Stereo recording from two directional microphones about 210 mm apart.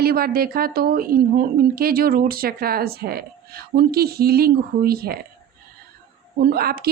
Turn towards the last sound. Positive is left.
turn(degrees=-45)  # may be behind; listen again after turning